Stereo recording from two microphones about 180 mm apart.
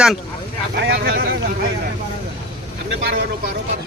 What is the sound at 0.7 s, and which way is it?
Vehicle, 70° right (ahead or behind).